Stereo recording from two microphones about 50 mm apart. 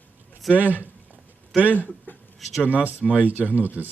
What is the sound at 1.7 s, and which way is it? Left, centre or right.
Speech, left.